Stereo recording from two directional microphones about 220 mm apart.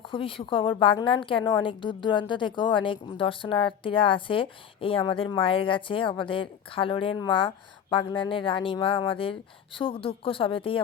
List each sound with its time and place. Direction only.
0.0 s a woman's voice: 25° left (ahead or behind)